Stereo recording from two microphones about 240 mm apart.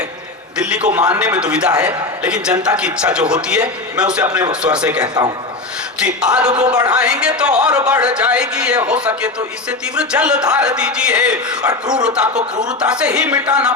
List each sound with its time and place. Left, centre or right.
0.5 s speech: centre
6.5 s speech: right
6.9 s speech: centre
12.3 s speech: right
12.6 s speech: centre